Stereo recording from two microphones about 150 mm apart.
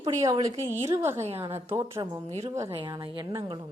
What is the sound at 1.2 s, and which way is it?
Speech, 40° right (ahead or behind).